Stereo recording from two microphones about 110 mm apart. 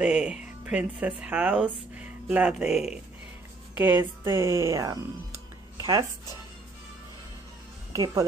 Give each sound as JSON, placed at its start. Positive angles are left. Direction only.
{"t": 0.0, "sound": "speech", "side_deg": -5}
{"t": 3.7, "sound": "speech", "side_deg": -15}
{"t": 5.8, "sound": "music", "side_deg": -35}
{"t": 7.9, "sound": "speech", "side_deg": -35}